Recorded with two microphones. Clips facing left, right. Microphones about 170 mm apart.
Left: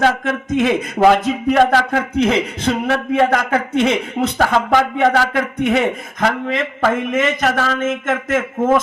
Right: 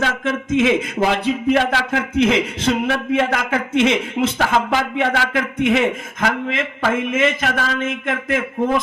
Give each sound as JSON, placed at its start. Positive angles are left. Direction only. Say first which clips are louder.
{"t": 0.0, "sound": "a man's voice", "louder": "left 4 dB", "side_deg": 45}